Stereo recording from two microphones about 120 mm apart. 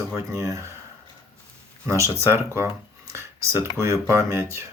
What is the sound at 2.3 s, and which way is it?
Speech, 20° right (ahead or behind).